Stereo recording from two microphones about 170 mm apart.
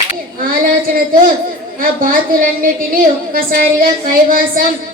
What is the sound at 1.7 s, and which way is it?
A woman's voice, 55° right (ahead or behind).